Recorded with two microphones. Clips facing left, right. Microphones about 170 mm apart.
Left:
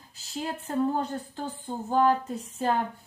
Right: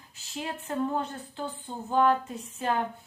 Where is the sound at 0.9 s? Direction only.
45° left (ahead or behind).